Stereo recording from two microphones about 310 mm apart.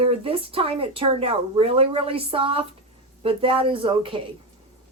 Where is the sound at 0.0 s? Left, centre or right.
Centre.